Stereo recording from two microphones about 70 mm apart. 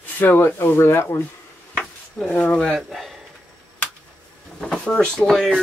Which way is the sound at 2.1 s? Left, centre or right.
Centre.